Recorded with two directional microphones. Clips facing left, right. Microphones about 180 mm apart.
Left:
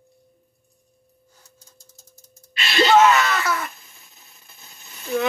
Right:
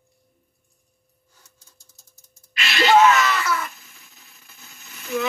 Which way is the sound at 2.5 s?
30° left (ahead or behind).